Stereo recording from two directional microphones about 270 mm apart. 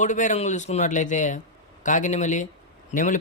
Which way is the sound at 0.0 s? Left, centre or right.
Left.